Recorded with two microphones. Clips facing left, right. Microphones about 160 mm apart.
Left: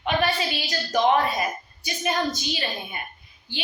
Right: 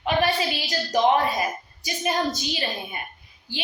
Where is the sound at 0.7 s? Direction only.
30° right (ahead or behind).